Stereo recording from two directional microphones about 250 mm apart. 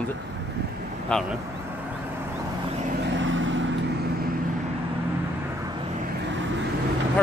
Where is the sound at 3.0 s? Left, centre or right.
Right.